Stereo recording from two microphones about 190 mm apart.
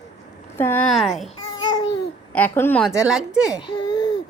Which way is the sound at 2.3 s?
10° left (ahead or behind).